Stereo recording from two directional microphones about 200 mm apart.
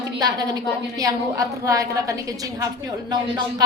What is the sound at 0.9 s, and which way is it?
A woman's voice, 15° right (ahead or behind).